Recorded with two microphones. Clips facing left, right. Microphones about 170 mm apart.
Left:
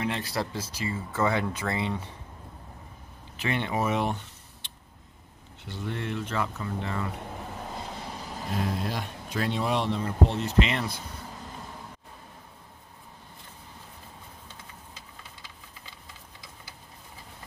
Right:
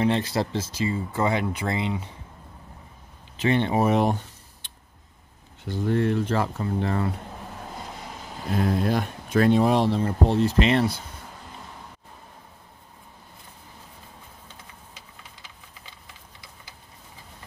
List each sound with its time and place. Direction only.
0.0 s speech: 25° right (ahead or behind)
3.3 s speech: 30° right (ahead or behind)
5.7 s speech: 40° right (ahead or behind)
8.8 s speech: 55° right (ahead or behind); by 10.9 s 35° right (ahead or behind)